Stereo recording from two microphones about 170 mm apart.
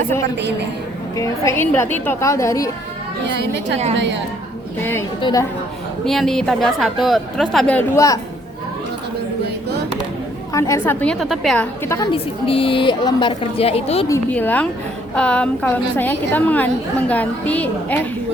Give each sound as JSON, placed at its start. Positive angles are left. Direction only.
{"t": 0.3, "sound": "a woman's voice", "side_deg": -90}
{"t": 1.1, "sound": "a woman's voice", "side_deg": 20}
{"t": 3.2, "sound": "a woman's voice", "side_deg": -90}
{"t": 4.8, "sound": "a woman's voice", "side_deg": 10}
{"t": 6.1, "sound": "a woman's voice", "side_deg": 0}
{"t": 7.8, "sound": "speech", "side_deg": 20}
{"t": 10.5, "sound": "a woman's voice", "side_deg": 20}
{"t": 11.0, "sound": "a woman's voice", "side_deg": 5}
{"t": 11.9, "sound": "a woman's voice", "side_deg": 30}
{"t": 14.1, "sound": "a woman's voice", "side_deg": 10}